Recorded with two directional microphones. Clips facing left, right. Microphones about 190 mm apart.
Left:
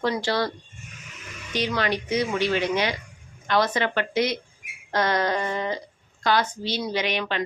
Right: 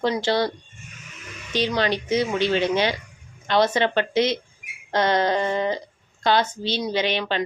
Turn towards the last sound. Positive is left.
turn(degrees=-30)  # may be behind; listen again after turning